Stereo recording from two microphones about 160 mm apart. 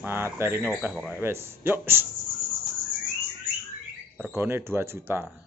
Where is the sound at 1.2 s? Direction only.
15° right (ahead or behind).